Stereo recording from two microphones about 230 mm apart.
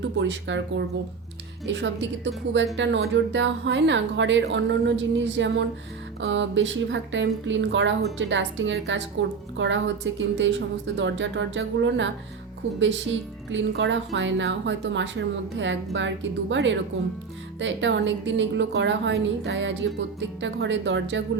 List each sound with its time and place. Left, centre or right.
0.2 s a woman's voice: right
1.6 s a woman's voice: right